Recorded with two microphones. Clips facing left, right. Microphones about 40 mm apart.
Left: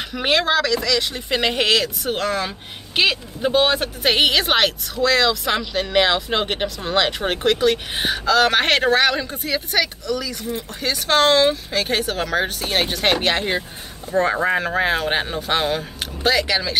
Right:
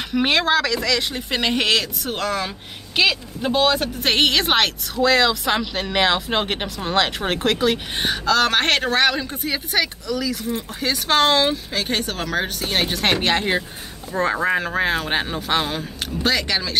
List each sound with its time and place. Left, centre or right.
0.1 s speech: centre
3.5 s speech: centre
4.0 s speech: centre